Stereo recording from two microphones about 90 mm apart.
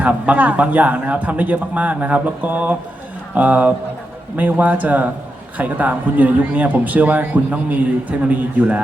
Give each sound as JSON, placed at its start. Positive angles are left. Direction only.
{"t": 0.0, "sound": "a man's voice", "side_deg": -15}